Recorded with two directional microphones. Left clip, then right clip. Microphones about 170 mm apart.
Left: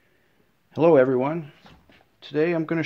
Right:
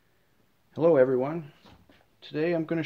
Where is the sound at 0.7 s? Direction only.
40° left (ahead or behind).